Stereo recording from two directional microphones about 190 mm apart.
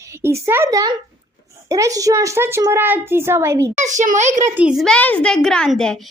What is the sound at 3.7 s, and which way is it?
Speech, 40° right (ahead or behind).